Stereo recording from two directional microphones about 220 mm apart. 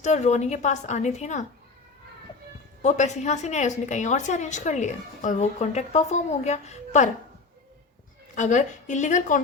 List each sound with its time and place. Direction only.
0.0 s a woman's voice: 30° left (ahead or behind)
2.8 s a woman's voice: 30° left (ahead or behind)
8.4 s a woman's voice: 35° left (ahead or behind)